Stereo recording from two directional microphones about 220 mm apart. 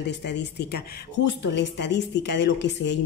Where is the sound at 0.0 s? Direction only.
50° left (ahead or behind).